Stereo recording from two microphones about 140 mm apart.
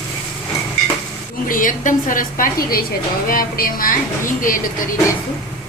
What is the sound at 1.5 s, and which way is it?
Dishes, 75° left (ahead or behind).